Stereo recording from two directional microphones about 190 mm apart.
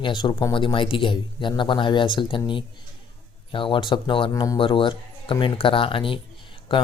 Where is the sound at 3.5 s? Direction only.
25° left (ahead or behind).